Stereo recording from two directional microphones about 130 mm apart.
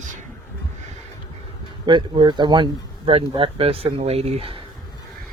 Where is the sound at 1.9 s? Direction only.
40° right (ahead or behind).